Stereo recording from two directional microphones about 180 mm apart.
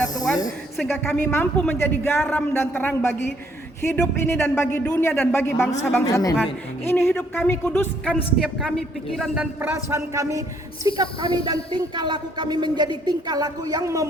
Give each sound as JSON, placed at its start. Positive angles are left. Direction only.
{"t": 0.8, "sound": "speech", "side_deg": 5}
{"t": 8.4, "sound": "a woman's voice", "side_deg": 0}